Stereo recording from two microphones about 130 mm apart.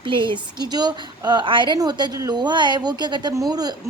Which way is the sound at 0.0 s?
40° right (ahead or behind).